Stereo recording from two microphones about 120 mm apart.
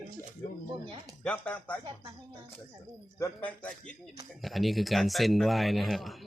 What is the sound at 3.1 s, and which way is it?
Speech, 15° left (ahead or behind).